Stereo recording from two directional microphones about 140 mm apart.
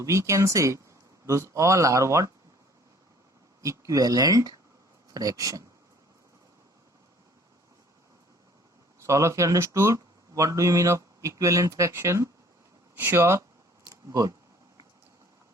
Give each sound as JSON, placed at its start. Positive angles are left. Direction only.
{"t": 0.0, "sound": "speech", "side_deg": -20}
{"t": 3.6, "sound": "speech", "side_deg": -25}
{"t": 9.0, "sound": "speech", "side_deg": -20}
{"t": 13.8, "sound": "a sound", "side_deg": -25}